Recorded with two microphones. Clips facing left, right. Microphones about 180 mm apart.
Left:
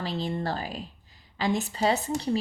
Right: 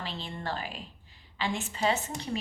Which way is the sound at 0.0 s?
40° left (ahead or behind).